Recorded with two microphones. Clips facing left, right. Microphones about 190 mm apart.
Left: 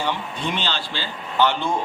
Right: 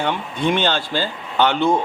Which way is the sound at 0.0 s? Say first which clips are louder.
Right 5 dB; 55° right (ahead or behind).